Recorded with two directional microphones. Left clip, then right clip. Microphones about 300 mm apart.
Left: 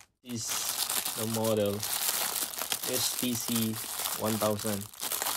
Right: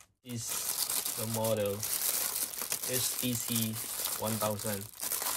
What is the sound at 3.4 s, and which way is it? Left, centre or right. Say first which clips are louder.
Speech: left 3 dB; centre.